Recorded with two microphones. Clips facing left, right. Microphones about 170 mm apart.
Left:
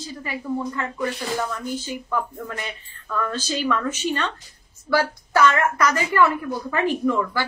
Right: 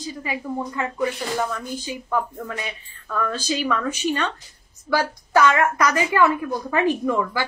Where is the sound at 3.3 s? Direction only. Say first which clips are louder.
Left 1 dB; 10° right (ahead or behind).